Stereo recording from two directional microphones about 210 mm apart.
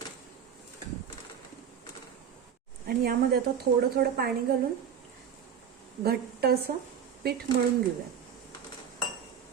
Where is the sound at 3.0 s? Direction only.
45° right (ahead or behind).